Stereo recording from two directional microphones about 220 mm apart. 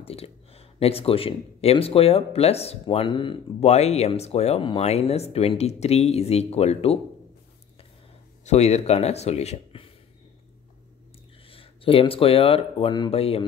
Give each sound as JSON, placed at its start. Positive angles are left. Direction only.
{"t": 0.0, "sound": "speech", "side_deg": 25}
{"t": 8.5, "sound": "speech", "side_deg": 30}
{"t": 11.4, "sound": "speech", "side_deg": 25}